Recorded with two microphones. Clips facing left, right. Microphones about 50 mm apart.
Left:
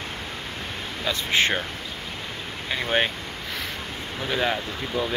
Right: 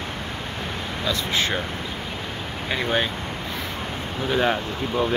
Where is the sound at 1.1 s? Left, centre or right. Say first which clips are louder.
Left 2 dB; left.